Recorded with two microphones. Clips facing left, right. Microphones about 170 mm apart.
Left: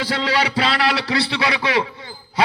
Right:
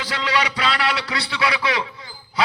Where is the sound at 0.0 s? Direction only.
30° left (ahead or behind).